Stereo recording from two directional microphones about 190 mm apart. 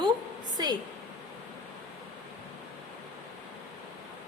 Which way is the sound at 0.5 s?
20° right (ahead or behind).